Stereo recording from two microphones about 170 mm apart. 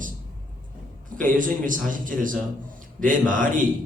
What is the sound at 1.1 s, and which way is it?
A man's voice, 50° right (ahead or behind).